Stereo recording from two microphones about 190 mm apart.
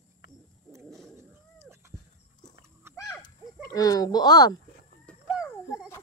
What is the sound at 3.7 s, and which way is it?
Speech, 20° left (ahead or behind).